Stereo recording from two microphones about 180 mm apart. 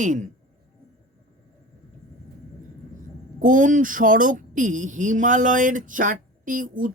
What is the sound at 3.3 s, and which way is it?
Speech, 45° right (ahead or behind).